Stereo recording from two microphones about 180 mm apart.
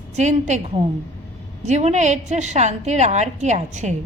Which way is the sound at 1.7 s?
40° right (ahead or behind).